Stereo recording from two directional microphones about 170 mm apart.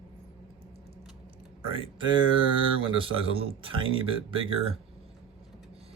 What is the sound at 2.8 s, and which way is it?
Speech, 30° right (ahead or behind).